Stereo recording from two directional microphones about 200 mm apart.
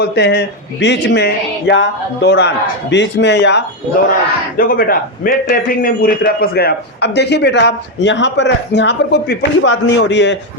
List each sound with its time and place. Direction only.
0.0 s a man's voice: 55° left (ahead or behind)
4.5 s a man's voice: 45° left (ahead or behind); by 10.3 s 65° left (ahead or behind)